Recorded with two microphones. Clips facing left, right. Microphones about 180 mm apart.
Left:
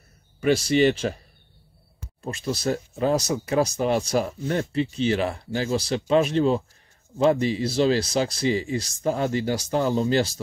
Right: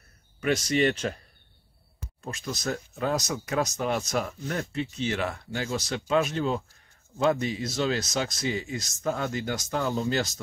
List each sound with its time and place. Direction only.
0.4 s speech: 30° left (ahead or behind)
0.7 s speech: 5° left (ahead or behind)
2.2 s speech: 30° left (ahead or behind)